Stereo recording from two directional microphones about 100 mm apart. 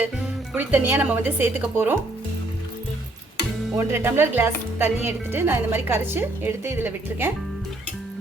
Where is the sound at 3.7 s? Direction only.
25° right (ahead or behind).